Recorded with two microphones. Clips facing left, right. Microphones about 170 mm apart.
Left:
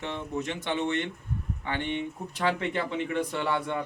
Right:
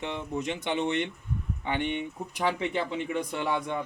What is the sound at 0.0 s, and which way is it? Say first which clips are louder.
Speech: even; 15° right (ahead or behind).